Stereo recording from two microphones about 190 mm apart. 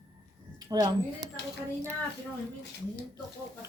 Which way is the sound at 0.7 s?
20° right (ahead or behind).